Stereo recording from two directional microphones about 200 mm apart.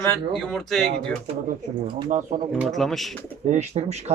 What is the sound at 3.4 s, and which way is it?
Speech, 35° right (ahead or behind).